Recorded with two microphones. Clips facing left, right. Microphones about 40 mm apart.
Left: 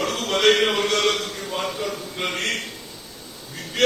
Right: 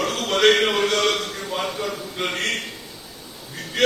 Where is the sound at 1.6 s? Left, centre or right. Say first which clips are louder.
Even; centre.